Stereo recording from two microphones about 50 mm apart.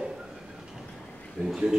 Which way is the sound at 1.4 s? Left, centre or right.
Centre.